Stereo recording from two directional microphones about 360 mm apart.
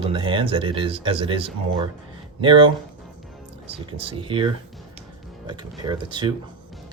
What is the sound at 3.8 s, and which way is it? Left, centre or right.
Speech, centre.